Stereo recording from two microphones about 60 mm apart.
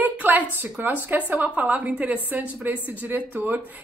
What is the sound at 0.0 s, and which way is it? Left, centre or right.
A woman's voice, right.